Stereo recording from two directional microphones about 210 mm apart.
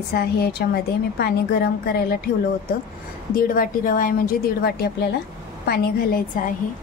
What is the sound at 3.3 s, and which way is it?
A woman's voice, 40° left (ahead or behind).